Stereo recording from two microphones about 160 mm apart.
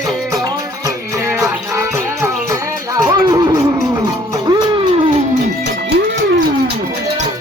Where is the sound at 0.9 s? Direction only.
20° right (ahead or behind).